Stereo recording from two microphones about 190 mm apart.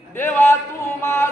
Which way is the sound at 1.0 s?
10° left (ahead or behind).